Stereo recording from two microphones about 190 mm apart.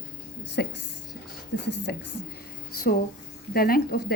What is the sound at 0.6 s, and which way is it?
Speech, 60° left (ahead or behind).